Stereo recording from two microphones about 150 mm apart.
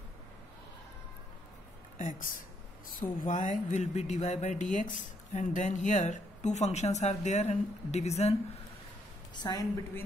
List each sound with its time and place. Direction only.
2.0 s speech: 65° left (ahead or behind); by 8.4 s 45° left (ahead or behind)
9.3 s a woman's voice: 25° left (ahead or behind)